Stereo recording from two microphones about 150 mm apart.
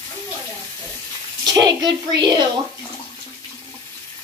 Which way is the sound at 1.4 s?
25° right (ahead or behind).